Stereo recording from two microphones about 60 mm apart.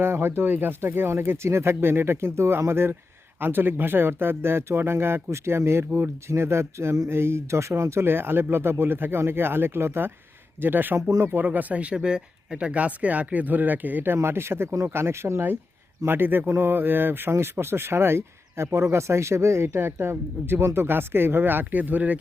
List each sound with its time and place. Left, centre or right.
0.0 s speech: right
14.2 s speech: right